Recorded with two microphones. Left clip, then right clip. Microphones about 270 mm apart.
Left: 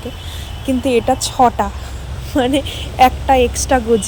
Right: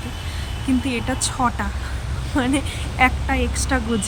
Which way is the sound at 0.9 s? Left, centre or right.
Centre.